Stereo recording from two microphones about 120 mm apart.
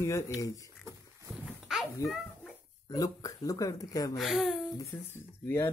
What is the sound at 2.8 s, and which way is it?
Speech, 30° left (ahead or behind).